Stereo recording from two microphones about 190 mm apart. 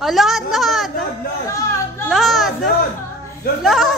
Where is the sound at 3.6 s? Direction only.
Centre (ahead or behind).